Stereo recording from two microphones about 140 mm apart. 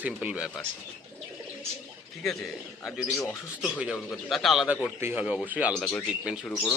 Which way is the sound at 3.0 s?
Centre (ahead or behind).